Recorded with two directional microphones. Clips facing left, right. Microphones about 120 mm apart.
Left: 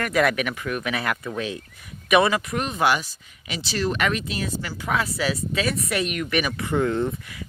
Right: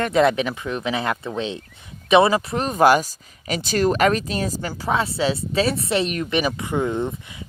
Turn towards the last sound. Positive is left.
turn(degrees=-20)  # may be behind; listen again after turning